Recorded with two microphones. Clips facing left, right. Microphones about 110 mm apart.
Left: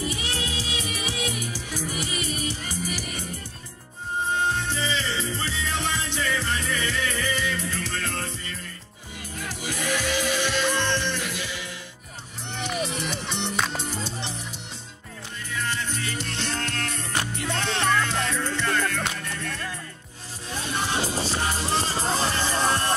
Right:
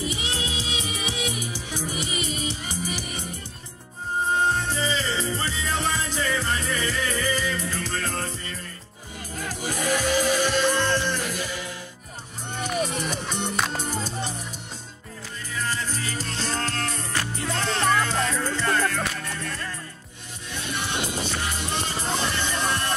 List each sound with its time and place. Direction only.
0.0 s music: 20° right (ahead or behind)
4.3 s music: 35° right (ahead or behind)
15.5 s music: 35° right (ahead or behind)
20.5 s music: 35° left (ahead or behind)